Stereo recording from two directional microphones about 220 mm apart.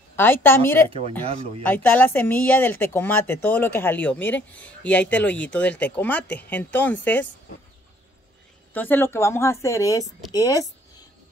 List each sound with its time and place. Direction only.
0.1 s speech: 10° left (ahead or behind)
1.2 s speech: 30° right (ahead or behind)
1.6 s speech: 10° left (ahead or behind)
8.7 s speech: 10° left (ahead or behind)